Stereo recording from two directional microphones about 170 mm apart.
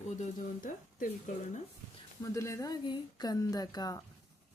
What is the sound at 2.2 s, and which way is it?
Speech, 15° left (ahead or behind).